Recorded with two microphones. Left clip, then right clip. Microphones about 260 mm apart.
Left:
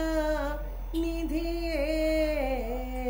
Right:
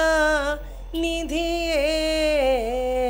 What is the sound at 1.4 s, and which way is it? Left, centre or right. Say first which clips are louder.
Mantra: right 10 dB; right.